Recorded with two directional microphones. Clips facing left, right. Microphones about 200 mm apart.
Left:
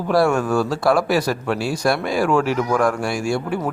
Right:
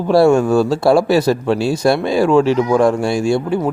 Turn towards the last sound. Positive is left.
turn(degrees=-25)  # may be behind; listen again after turning